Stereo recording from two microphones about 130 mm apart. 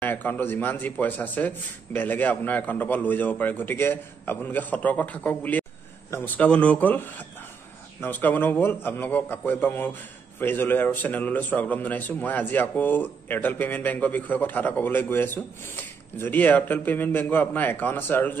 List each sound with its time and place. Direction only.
0.0 s a man's voice: 15° left (ahead or behind)